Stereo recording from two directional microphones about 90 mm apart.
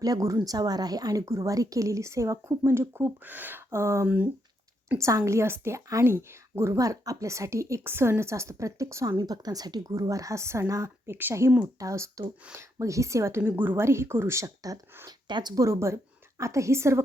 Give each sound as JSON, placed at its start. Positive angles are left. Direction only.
{"t": 0.0, "sound": "a woman's voice", "side_deg": -40}
{"t": 1.2, "sound": "speech", "side_deg": -35}
{"t": 4.0, "sound": "speech", "side_deg": -15}
{"t": 4.9, "sound": "speech", "side_deg": -35}
{"t": 9.1, "sound": "speech", "side_deg": -45}
{"t": 11.8, "sound": "speech", "side_deg": -35}
{"t": 13.4, "sound": "speech", "side_deg": -20}
{"t": 15.3, "sound": "speech", "side_deg": -55}
{"t": 15.5, "sound": "speech", "side_deg": -35}